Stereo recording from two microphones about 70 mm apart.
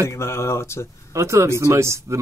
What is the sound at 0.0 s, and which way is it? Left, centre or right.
Speech, left.